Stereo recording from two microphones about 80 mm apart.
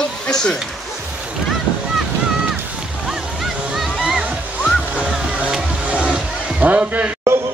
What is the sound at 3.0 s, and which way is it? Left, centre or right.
Water, centre.